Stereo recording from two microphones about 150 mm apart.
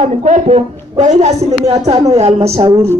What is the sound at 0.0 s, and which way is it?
A woman's voice, 45° right (ahead or behind).